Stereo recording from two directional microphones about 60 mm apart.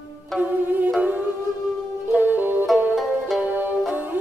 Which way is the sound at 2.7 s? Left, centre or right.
Centre.